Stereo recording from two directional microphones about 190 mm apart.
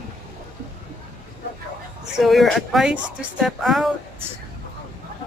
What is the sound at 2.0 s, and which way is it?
Speech, centre (ahead or behind).